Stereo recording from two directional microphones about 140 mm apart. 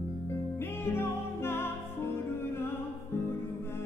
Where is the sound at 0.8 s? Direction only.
15° left (ahead or behind).